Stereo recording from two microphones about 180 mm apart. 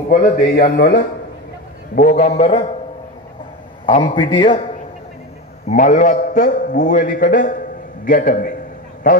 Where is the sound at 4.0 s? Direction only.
25° left (ahead or behind).